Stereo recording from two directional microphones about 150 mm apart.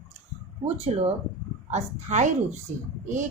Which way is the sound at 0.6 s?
40° right (ahead or behind).